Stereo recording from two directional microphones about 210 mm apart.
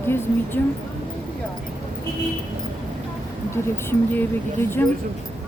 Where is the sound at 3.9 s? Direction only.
10° left (ahead or behind).